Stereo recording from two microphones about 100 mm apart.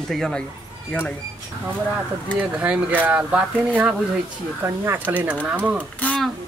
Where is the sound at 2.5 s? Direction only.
10° right (ahead or behind).